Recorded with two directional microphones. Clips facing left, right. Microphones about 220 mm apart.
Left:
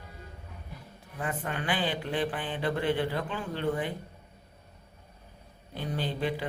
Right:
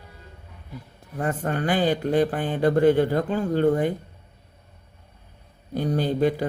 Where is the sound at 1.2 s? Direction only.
45° right (ahead or behind).